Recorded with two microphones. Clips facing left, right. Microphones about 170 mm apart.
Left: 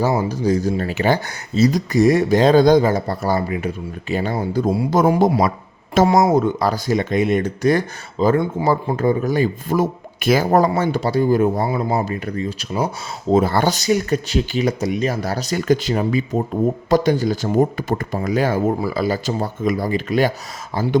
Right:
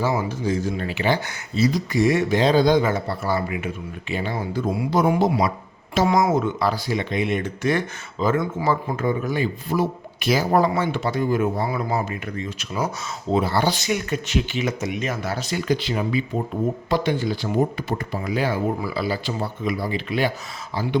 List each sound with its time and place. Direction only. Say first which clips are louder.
0.0 s speech: left 4 dB; 40° left (ahead or behind)
13.3 s speech: left 5 dB; 50° left (ahead or behind)